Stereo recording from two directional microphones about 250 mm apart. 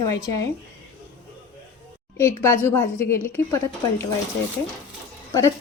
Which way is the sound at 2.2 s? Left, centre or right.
Centre.